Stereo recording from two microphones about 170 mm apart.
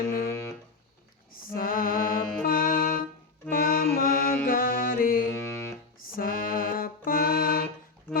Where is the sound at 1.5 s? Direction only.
55° left (ahead or behind).